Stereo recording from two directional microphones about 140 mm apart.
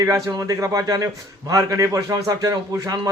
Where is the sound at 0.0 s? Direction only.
25° right (ahead or behind).